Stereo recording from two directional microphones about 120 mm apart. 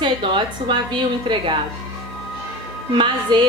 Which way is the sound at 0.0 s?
40° right (ahead or behind).